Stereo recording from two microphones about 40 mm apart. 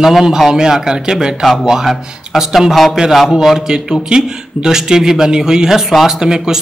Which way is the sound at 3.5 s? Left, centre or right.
Centre.